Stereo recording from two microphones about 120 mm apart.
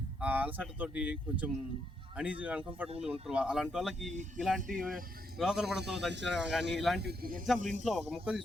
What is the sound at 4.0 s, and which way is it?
Speech, 85° right.